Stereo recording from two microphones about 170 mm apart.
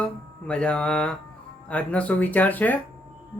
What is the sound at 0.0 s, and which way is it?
Speech, 5° left (ahead or behind).